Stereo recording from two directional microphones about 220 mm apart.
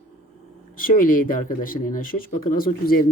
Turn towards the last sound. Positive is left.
turn(degrees=40)  # may be behind; listen again after turning